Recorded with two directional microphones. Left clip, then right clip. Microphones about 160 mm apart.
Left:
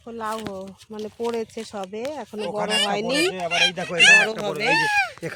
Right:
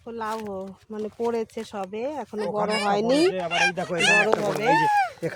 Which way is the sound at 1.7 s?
30° right (ahead or behind).